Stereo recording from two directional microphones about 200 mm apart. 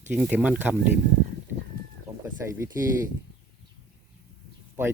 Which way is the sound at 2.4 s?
15° right (ahead or behind).